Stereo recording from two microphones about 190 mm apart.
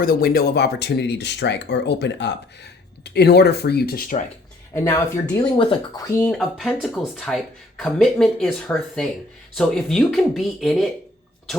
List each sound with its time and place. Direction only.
0.0 s speech: 50° left (ahead or behind)
4.7 s speech: 15° left (ahead or behind)
5.3 s speech: 25° left (ahead or behind)
6.1 s speech: 15° left (ahead or behind)
6.3 s speech: centre (ahead or behind)